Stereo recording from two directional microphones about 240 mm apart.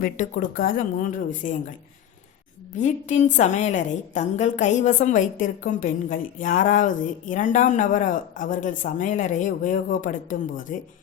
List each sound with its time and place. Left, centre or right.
0.0 s a woman's voice: left
2.7 s a woman's voice: left